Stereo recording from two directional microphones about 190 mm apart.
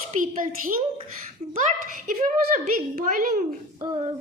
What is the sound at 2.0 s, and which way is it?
A child's voice, 45° right (ahead or behind).